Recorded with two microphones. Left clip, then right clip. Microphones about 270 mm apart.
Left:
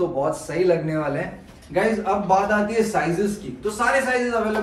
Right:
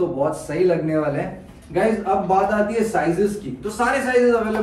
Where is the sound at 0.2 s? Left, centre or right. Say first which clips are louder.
Right 2 dB; centre.